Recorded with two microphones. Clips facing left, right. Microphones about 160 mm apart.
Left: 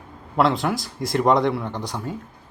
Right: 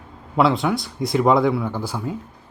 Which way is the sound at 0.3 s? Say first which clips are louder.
Right 2 dB; centre (ahead or behind).